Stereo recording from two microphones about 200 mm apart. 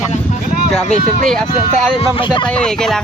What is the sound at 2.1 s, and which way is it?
Speech, 25° left (ahead or behind).